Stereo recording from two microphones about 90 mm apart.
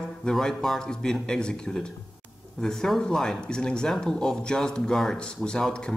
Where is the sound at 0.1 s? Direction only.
5° left (ahead or behind).